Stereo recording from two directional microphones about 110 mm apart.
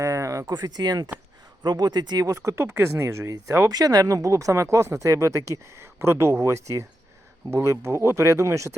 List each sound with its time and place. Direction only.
0.0 s speech: 30° right (ahead or behind)